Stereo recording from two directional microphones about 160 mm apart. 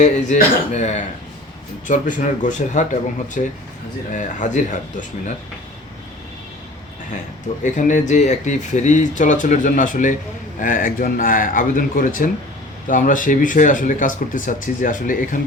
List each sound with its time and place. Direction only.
0.7 s speech: 45° left (ahead or behind)
7.6 s speech: 50° left (ahead or behind)